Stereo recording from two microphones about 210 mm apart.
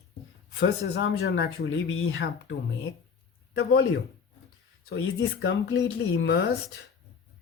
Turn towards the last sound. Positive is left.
turn(degrees=50)  # may be behind; listen again after turning